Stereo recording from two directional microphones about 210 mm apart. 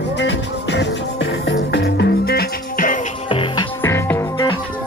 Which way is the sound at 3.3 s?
25° left (ahead or behind).